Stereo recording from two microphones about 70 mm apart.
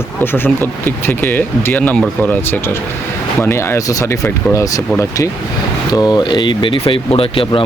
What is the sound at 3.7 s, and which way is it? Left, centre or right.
Speech, left.